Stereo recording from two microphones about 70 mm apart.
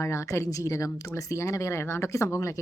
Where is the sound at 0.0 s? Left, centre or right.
Left.